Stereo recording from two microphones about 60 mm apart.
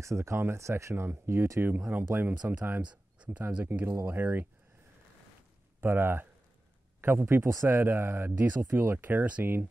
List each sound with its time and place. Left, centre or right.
0.0 s speech: right
3.8 s speech: right
5.8 s speech: right
7.4 s speech: right
7.7 s speech: right